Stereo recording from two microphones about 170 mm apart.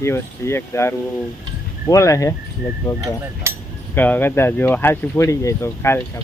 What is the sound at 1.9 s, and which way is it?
Speech, 20° left (ahead or behind).